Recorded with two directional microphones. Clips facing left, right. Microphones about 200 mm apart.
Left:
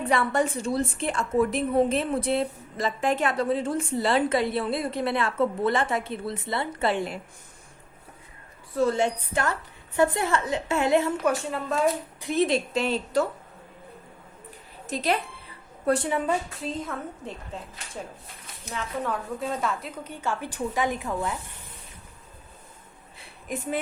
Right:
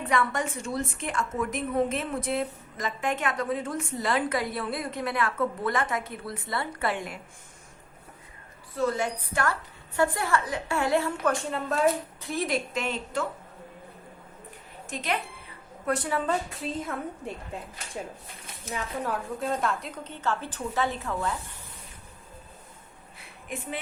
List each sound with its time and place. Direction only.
0.1 s a woman's voice: 35° left (ahead or behind)
8.9 s a woman's voice: 25° left (ahead or behind)
11.3 s a woman's voice: centre (ahead or behind)
12.2 s a woman's voice: 20° left (ahead or behind)
14.8 s a woman's voice: 35° left (ahead or behind)
16.0 s a woman's voice: 15° left (ahead or behind); by 17.6 s 5° right (ahead or behind)
19.1 s a woman's voice: centre (ahead or behind)
23.5 s a woman's voice: 40° left (ahead or behind)